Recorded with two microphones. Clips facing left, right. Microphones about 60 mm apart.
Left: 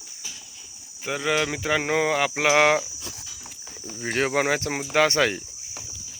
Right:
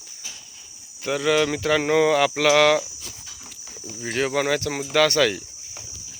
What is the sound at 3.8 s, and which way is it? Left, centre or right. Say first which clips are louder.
Speech: even; left.